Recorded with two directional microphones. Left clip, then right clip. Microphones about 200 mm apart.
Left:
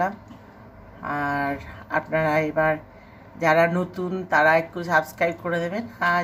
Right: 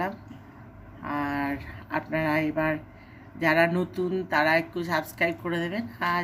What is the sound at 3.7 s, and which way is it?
Speech, 15° right (ahead or behind).